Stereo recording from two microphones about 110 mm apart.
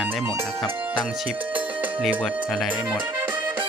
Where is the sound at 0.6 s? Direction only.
5° left (ahead or behind).